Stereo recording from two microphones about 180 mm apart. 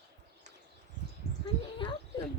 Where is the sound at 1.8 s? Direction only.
30° left (ahead or behind).